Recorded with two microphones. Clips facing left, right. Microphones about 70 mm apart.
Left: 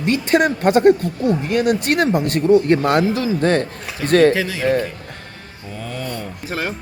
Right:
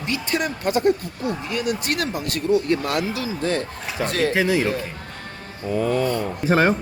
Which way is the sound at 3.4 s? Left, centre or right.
Left.